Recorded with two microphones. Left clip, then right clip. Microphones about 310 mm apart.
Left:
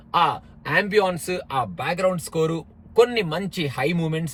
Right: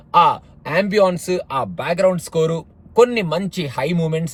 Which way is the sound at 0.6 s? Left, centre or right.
Centre.